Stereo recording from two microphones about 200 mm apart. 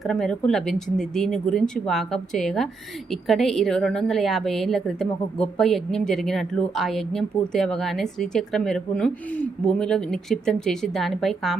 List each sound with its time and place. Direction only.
0.0 s a woman's voice: centre (ahead or behind)